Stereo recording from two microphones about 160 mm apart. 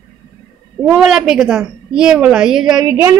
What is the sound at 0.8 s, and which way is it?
A woman's voice, 5° right (ahead or behind).